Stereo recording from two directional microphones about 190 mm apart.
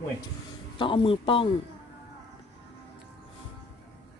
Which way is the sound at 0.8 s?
25° left (ahead or behind).